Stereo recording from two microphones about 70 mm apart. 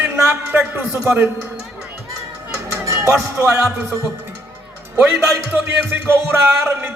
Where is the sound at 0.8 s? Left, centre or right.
Centre.